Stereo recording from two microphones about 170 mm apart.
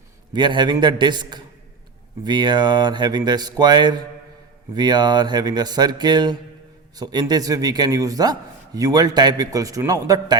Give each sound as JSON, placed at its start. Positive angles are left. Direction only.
{"t": 0.3, "sound": "a man's voice", "side_deg": -25}